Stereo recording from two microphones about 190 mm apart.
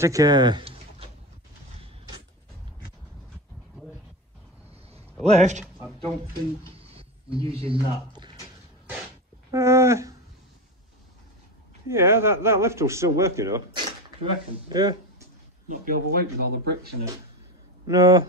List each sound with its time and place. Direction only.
0.0 s a sound: 20° right (ahead or behind)
5.2 s speech: 35° right (ahead or behind)
7.0 s speech: 30° right (ahead or behind)
9.5 s a man's voice: 15° right (ahead or behind)
11.9 s a man's voice: 15° right (ahead or behind)
15.8 s speech: 50° right (ahead or behind)
17.8 s speech: 20° right (ahead or behind)